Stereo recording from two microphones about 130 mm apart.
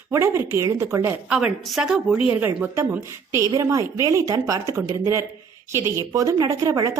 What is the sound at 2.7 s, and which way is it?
A woman's voice, 20° right (ahead or behind).